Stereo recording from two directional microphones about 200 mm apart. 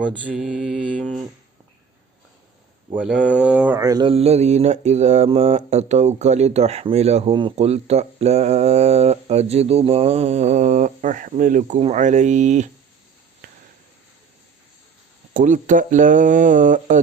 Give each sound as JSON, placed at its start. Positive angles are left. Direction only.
{"t": 0.2, "sound": "mantra", "side_deg": -5}
{"t": 2.9, "sound": "mantra", "side_deg": -5}
{"t": 3.8, "sound": "speech", "side_deg": -20}
{"t": 15.3, "sound": "speech", "side_deg": -40}